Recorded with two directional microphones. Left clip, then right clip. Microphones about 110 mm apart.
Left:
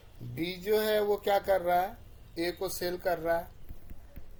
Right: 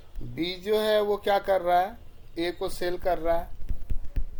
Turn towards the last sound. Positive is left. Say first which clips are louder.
# right 4 dB
turn(degrees=-25)  # may be behind; listen again after turning